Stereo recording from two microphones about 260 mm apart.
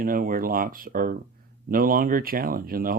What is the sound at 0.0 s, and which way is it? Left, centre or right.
Speech, right.